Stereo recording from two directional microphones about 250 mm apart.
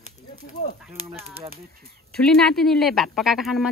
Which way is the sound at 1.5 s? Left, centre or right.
Right.